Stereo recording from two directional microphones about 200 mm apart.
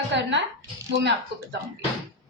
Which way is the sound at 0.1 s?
65° right (ahead or behind).